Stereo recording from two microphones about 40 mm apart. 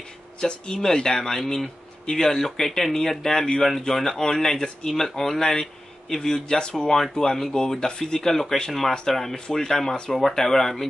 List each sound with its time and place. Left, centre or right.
0.4 s speech: centre
7.0 s speech: centre